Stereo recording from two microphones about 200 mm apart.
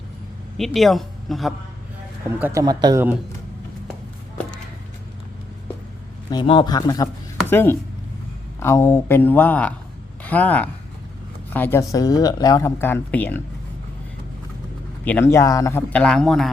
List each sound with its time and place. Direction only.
0.5 s speech: centre (ahead or behind)
2.4 s speech: 15° right (ahead or behind)
6.3 s speech: 25° left (ahead or behind); by 13.4 s 10° left (ahead or behind)
15.0 s speech: 10° left (ahead or behind)